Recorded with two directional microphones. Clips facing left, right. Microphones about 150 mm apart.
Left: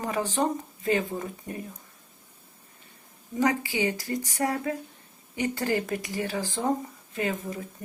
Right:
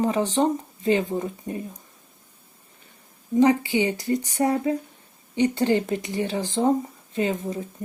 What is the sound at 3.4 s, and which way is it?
Speech, 20° right (ahead or behind).